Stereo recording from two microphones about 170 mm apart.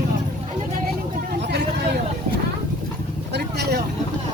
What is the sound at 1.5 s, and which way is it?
Vehicle, 80° right.